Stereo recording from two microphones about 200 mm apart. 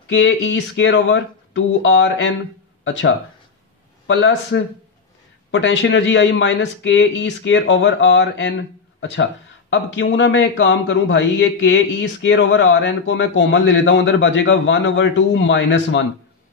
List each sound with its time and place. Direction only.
0.1 s speech: 65° left (ahead or behind)
4.1 s speech: 60° left (ahead or behind)